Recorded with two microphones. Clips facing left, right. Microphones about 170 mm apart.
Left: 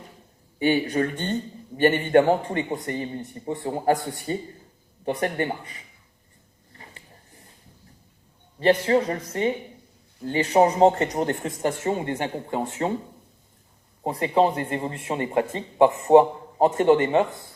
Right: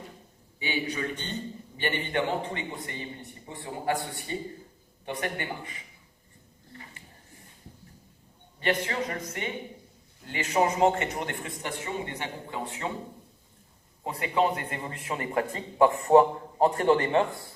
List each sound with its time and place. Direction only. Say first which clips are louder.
0.6 s a man's voice: left 10 dB; 50° left (ahead or behind); by 5.7 s 35° left (ahead or behind)
8.5 s speech: left 9 dB; 35° left (ahead or behind)
14.0 s a man's voice: left 6 dB; 35° left (ahead or behind); by 17.2 s 20° left (ahead or behind)